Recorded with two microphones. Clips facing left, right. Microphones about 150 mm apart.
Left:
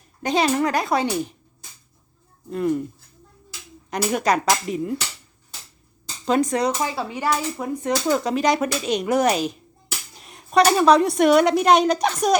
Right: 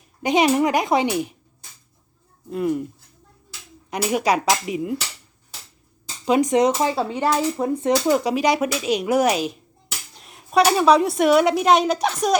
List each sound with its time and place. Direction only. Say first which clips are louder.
0.2 s speech: right 3 dB; 15° right (ahead or behind)
2.5 s speech: even; 5° right (ahead or behind)
3.8 s speech: right 1 dB; 5° right (ahead or behind)
6.2 s speech: right 3 dB; 15° right (ahead or behind)
8.1 s speech: right 1 dB; 10° right (ahead or behind)